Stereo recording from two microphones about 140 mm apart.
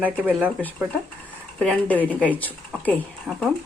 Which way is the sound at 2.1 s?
10° right (ahead or behind).